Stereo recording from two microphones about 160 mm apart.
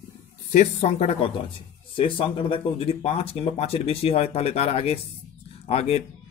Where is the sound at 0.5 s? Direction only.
45° left (ahead or behind).